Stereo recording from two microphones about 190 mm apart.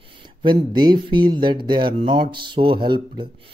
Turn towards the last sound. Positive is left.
turn(degrees=-25)  # may be behind; listen again after turning